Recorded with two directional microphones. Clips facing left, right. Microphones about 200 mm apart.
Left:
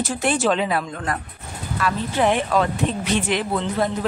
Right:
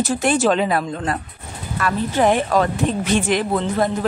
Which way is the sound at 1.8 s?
40° right (ahead or behind).